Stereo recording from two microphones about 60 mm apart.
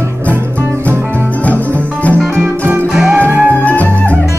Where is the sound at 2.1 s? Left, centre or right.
Centre.